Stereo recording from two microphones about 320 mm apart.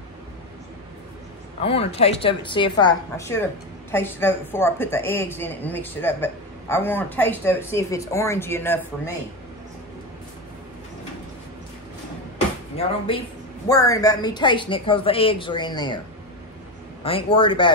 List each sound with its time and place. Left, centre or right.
1.6 s a woman's voice: centre
12.7 s a woman's voice: centre
17.0 s a woman's voice: centre